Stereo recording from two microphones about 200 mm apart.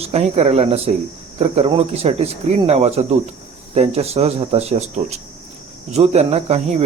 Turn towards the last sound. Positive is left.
turn(degrees=-35)  # may be behind; listen again after turning